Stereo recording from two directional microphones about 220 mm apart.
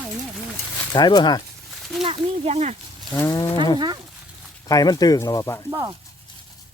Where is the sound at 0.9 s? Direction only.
20° left (ahead or behind).